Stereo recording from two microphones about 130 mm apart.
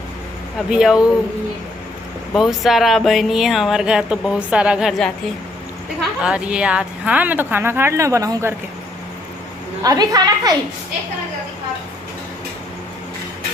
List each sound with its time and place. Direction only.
0.7 s speech: 5° right (ahead or behind)
2.3 s speech: centre (ahead or behind)
6.2 s speech: 10° right (ahead or behind); by 8.5 s 25° right (ahead or behind)
9.8 s a woman's voice: 25° right (ahead or behind)